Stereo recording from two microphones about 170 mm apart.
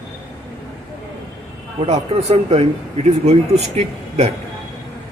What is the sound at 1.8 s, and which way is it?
Speech, 40° right (ahead or behind).